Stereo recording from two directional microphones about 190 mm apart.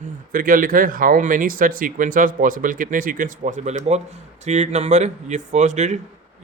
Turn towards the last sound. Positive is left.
turn(degrees=-35)  # may be behind; listen again after turning